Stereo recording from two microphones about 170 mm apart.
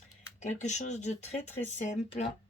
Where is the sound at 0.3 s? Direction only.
40° left (ahead or behind).